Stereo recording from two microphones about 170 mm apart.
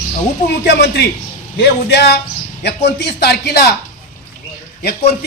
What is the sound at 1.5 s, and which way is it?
A man's voice, 80° left.